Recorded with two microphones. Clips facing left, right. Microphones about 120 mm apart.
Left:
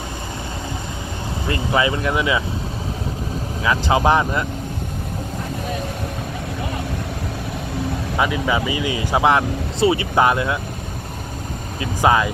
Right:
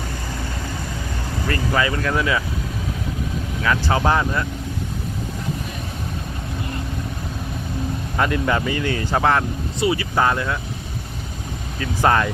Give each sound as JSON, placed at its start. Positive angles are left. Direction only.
{"t": 1.5, "sound": "speech", "side_deg": 20}
{"t": 3.6, "sound": "speech", "side_deg": 15}
{"t": 8.2, "sound": "speech", "side_deg": 5}
{"t": 9.8, "sound": "speech", "side_deg": 25}
{"t": 11.8, "sound": "speech", "side_deg": 10}